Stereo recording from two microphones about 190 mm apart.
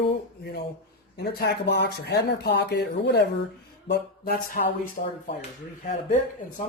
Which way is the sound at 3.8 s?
55° left (ahead or behind).